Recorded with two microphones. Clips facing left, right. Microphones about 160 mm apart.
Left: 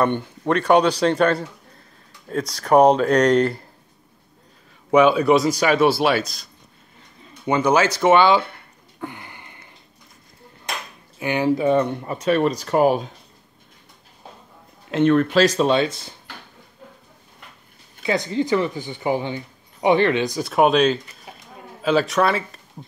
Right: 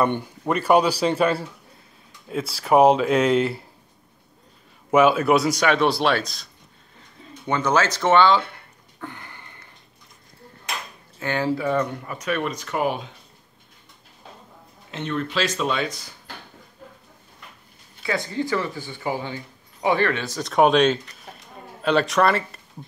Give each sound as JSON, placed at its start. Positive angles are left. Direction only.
{"t": 0.0, "sound": "a man's voice", "side_deg": -10}
{"t": 4.9, "sound": "speech", "side_deg": -5}
{"t": 7.4, "sound": "speech", "side_deg": 10}
{"t": 9.0, "sound": "a sound", "side_deg": 15}
{"t": 11.1, "sound": "speech", "side_deg": 15}
{"t": 15.0, "sound": "speech", "side_deg": 55}
{"t": 18.0, "sound": "speech", "side_deg": 20}